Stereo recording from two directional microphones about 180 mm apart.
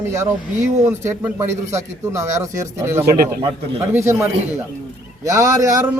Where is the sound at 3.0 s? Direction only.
55° right (ahead or behind).